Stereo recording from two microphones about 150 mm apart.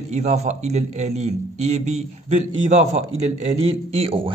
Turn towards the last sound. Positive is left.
turn(degrees=-40)  # may be behind; listen again after turning